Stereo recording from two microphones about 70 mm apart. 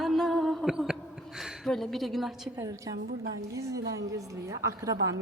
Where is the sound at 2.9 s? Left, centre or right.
Right.